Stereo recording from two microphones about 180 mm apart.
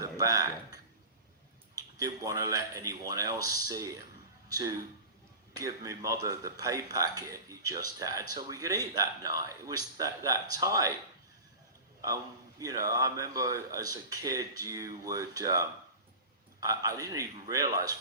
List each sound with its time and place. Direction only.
0.0 s a sound: 20° right (ahead or behind)
1.7 s a man's voice: 20° right (ahead or behind)
12.0 s a man's voice: 20° right (ahead or behind)